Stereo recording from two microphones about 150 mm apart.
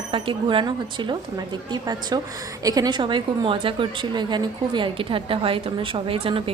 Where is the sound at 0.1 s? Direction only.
35° right (ahead or behind).